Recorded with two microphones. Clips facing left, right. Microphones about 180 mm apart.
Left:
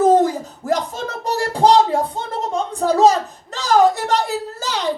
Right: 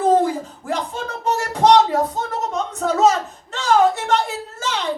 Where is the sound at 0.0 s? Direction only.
40° left (ahead or behind).